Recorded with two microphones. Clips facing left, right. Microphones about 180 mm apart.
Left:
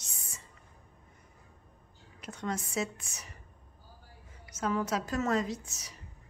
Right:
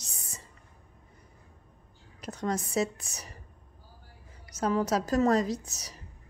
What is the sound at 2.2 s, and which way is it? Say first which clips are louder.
A woman's voice: right 4 dB; 40° right (ahead or behind).